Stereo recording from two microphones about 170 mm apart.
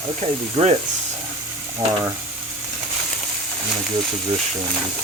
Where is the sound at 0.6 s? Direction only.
35° right (ahead or behind).